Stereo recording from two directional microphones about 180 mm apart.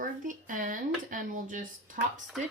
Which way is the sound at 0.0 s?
45° right (ahead or behind).